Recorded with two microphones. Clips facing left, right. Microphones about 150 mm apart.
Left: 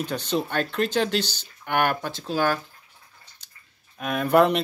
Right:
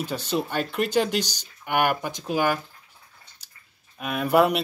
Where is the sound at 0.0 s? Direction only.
10° right (ahead or behind).